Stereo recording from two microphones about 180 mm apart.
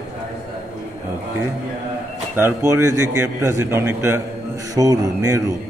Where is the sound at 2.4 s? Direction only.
15° right (ahead or behind).